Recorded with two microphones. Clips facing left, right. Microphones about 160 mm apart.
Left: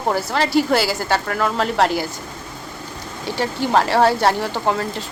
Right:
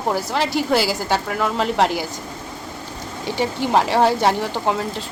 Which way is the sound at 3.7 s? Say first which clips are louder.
Left 1 dB; 5° right (ahead or behind).